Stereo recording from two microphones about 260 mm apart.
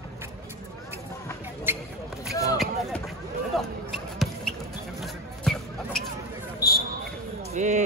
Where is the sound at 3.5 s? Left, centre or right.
Centre.